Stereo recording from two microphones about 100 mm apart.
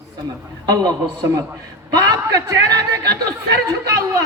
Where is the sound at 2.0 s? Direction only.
30° right (ahead or behind).